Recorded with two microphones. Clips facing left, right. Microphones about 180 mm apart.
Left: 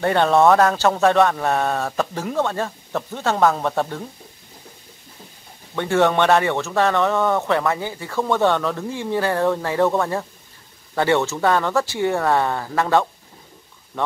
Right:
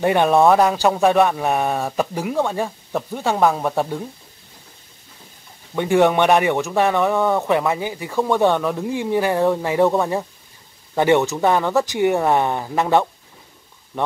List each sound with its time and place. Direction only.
0.0 s speech: 15° right (ahead or behind)
5.8 s speech: 15° right (ahead or behind)